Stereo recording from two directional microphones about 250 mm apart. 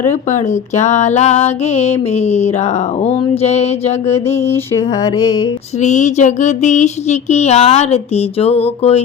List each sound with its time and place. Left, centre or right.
0.1 s female singing: left
4.4 s a sound: centre
5.8 s female singing: left